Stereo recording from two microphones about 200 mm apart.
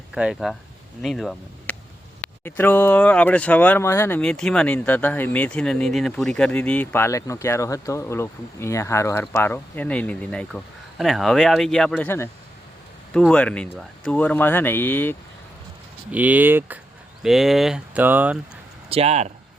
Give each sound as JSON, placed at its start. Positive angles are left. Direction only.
{"t": 0.1, "sound": "speech", "side_deg": -5}
{"t": 16.1, "sound": "speech", "side_deg": -10}
{"t": 18.9, "sound": "speech", "side_deg": -30}